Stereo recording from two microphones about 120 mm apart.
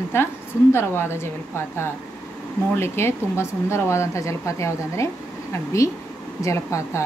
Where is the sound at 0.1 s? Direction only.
20° left (ahead or behind).